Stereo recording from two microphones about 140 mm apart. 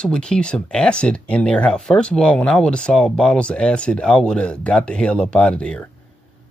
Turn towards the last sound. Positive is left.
turn(degrees=10)  # may be behind; listen again after turning